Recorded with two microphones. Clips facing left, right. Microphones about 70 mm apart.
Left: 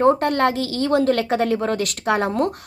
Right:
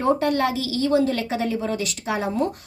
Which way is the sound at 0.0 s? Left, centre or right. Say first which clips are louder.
Left 4 dB; left.